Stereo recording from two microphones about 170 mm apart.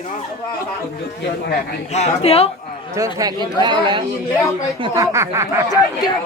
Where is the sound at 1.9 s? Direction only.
40° left (ahead or behind).